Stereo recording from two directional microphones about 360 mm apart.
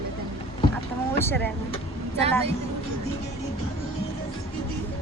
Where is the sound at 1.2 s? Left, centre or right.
Centre.